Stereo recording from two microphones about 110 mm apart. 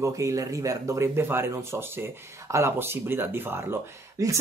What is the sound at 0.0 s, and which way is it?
Speech, 30° right (ahead or behind).